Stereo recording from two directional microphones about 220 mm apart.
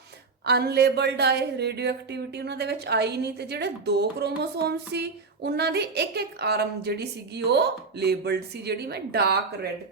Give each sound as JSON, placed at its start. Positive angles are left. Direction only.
{"t": 0.4, "sound": "a woman's voice", "side_deg": -45}